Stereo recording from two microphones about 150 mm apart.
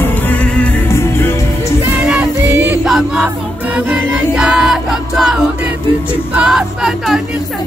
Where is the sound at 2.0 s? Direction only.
10° right (ahead or behind).